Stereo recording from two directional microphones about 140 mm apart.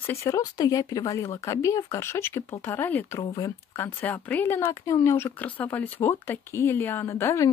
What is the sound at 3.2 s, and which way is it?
Speech, 25° left (ahead or behind).